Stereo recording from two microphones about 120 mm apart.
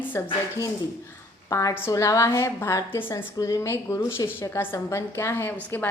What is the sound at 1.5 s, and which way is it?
A woman's voice, 25° left (ahead or behind).